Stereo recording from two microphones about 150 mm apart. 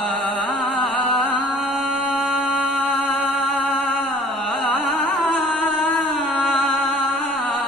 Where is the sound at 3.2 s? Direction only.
10° left (ahead or behind).